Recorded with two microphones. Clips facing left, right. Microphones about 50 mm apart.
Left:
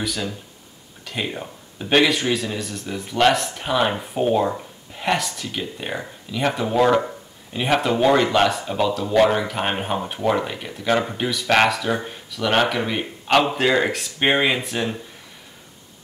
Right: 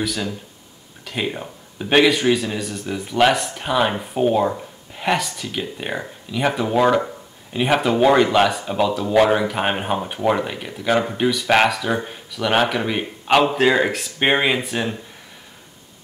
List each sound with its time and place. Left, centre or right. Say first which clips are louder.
0.0 s speech: right 2 dB; centre